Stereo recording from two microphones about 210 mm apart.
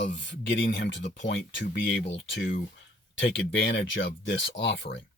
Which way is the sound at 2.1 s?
60° left (ahead or behind).